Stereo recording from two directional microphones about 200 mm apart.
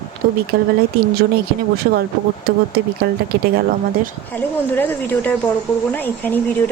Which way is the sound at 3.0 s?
55° right (ahead or behind).